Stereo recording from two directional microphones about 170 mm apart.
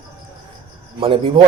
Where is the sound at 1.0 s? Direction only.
30° right (ahead or behind).